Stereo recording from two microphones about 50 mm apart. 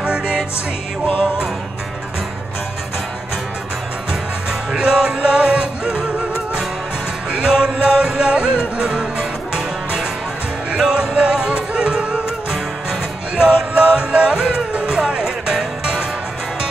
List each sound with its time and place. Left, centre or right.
0.0 s music: centre
4.1 s music: centre
7.2 s music: centre
10.8 s music: centre